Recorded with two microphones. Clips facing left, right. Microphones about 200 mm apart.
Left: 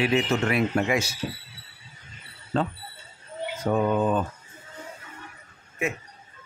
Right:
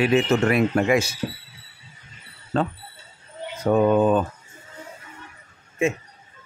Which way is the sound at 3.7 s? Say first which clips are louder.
Right 6 dB; 60° right (ahead or behind).